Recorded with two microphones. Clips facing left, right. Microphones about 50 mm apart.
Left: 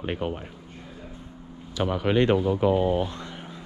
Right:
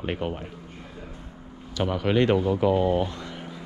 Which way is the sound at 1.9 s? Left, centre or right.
Left.